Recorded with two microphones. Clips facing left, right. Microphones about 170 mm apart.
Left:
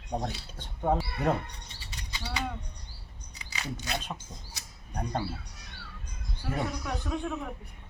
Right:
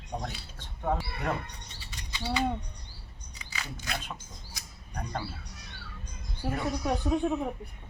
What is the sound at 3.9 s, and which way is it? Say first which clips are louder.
Speech: left 2 dB; 35° left (ahead or behind).